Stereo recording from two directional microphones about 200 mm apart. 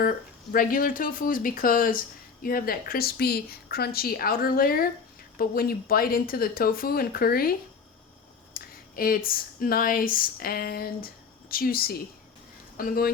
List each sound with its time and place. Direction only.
0.5 s speech: 45° left (ahead or behind)
8.5 s speech: 45° left (ahead or behind)